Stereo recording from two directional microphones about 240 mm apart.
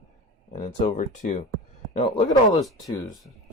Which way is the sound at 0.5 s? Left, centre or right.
Left.